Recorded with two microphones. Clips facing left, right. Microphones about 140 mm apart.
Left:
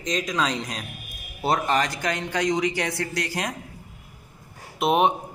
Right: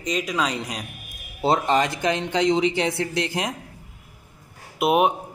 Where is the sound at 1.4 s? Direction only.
25° right (ahead or behind).